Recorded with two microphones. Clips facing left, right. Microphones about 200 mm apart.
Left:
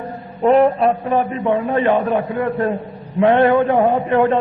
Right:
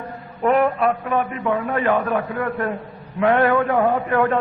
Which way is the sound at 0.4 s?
30° left (ahead or behind).